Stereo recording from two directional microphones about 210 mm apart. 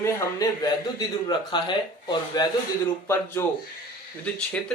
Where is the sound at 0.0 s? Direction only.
15° left (ahead or behind).